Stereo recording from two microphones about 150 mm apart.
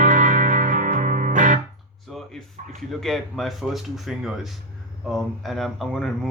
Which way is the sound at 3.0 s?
Centre (ahead or behind).